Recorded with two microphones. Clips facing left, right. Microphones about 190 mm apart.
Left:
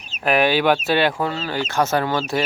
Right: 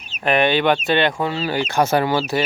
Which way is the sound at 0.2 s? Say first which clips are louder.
Even; 5° left (ahead or behind).